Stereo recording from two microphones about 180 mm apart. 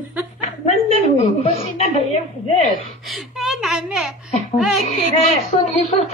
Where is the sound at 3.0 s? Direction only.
Centre (ahead or behind).